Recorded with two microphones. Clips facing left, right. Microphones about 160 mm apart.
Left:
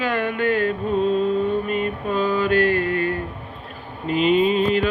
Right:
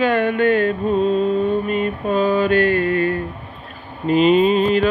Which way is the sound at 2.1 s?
20° right (ahead or behind).